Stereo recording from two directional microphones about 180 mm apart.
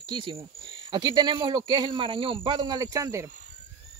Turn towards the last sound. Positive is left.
turn(degrees=-15)  # may be behind; listen again after turning